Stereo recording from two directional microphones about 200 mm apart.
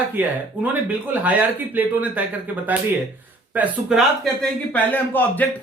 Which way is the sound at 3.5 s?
5° right (ahead or behind).